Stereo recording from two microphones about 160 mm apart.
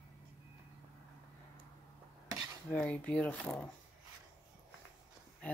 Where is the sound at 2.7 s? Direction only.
10° left (ahead or behind).